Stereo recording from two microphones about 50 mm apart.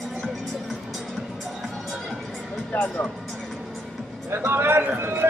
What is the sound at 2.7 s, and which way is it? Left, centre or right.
Music, left.